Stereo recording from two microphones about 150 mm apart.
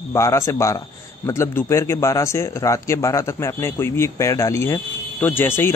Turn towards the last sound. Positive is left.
turn(degrees=15)  # may be behind; listen again after turning